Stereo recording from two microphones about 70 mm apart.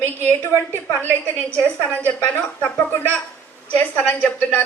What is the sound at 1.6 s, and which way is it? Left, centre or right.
A woman's voice, left.